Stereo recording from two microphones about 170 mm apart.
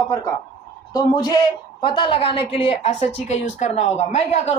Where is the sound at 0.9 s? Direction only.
20° left (ahead or behind); by 4.5 s 40° left (ahead or behind).